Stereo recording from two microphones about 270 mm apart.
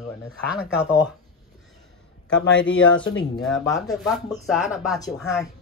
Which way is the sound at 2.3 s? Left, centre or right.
Left.